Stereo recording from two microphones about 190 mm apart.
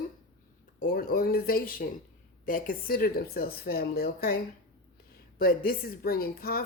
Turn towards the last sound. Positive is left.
turn(degrees=55)  # may be behind; listen again after turning